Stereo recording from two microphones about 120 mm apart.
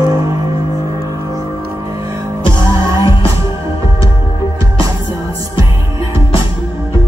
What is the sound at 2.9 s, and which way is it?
Music, 25° right (ahead or behind).